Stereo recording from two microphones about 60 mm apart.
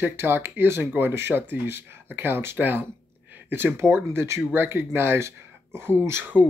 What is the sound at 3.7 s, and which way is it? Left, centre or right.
Speech, right.